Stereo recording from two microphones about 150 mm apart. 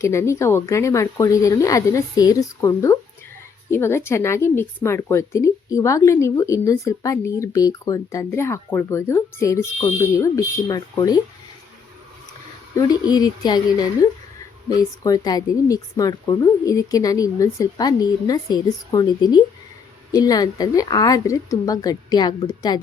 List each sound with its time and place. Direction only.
0.0 s speech: 20° left (ahead or behind)
12.7 s speech: 25° left (ahead or behind)